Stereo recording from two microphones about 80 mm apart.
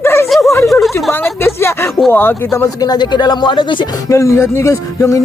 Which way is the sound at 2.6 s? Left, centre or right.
Left.